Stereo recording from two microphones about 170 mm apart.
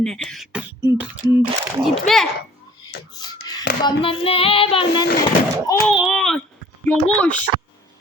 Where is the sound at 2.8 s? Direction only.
25° left (ahead or behind).